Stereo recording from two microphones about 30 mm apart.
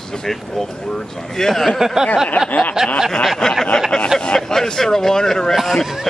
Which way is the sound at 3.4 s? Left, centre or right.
Centre.